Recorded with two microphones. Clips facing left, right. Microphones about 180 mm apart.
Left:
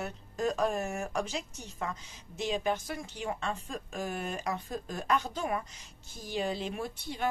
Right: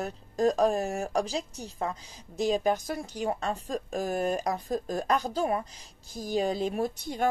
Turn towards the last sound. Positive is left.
turn(degrees=-45)  # may be behind; listen again after turning